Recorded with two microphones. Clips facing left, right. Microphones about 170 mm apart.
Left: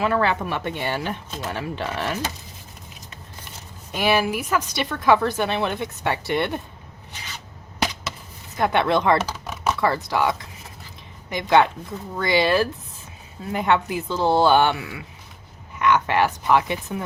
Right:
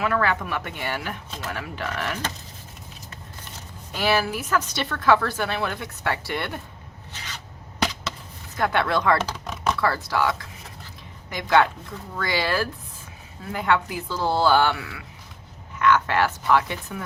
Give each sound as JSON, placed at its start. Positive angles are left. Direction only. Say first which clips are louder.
{"t": 0.0, "sound": "speech", "louder": "left 2 dB", "side_deg": 25}
{"t": 3.9, "sound": "speech", "louder": "left 2 dB", "side_deg": 15}
{"t": 8.5, "sound": "speech", "louder": "left 3 dB", "side_deg": 20}
{"t": 9.3, "sound": "computer keyboard", "louder": "left 1 dB", "side_deg": 5}
{"t": 9.8, "sound": "speech", "louder": "left 3 dB", "side_deg": 20}